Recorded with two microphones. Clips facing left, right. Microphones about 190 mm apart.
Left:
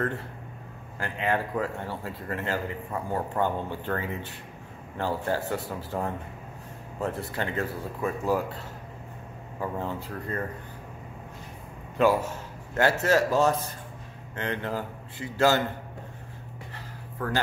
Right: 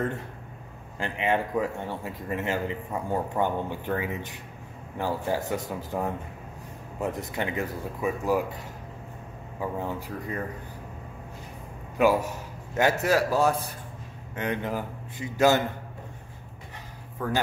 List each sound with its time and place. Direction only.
0.9 s a man's voice: 20° right (ahead or behind)
9.6 s a man's voice: 15° right (ahead or behind)
12.0 s a man's voice: 15° right (ahead or behind)